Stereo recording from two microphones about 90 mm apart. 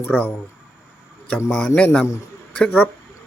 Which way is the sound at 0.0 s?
20° left (ahead or behind).